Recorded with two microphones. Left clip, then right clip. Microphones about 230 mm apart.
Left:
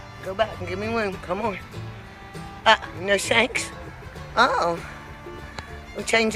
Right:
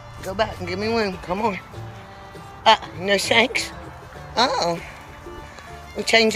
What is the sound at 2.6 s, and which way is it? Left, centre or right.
Speech, centre.